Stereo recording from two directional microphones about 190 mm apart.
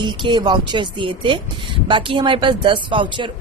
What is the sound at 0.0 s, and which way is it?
Speech, 25° right (ahead or behind).